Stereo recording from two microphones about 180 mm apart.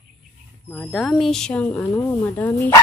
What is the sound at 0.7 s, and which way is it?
Speech, 5° left (ahead or behind).